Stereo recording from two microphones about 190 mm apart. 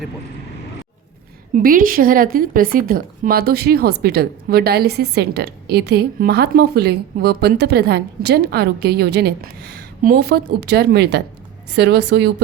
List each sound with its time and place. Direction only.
1.5 s a woman's voice: 45° right (ahead or behind); by 12.3 s 65° right (ahead or behind)